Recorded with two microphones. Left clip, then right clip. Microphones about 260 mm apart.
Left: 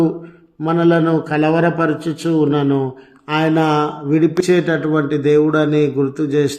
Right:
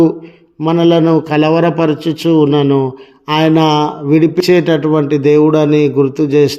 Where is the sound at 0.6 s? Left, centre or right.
Right.